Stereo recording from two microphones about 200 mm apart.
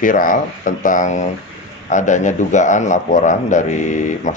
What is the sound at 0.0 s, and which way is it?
Speech, 40° left (ahead or behind).